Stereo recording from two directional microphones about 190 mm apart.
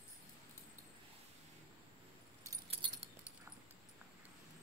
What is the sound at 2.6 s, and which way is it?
Keys jangling, 25° right (ahead or behind).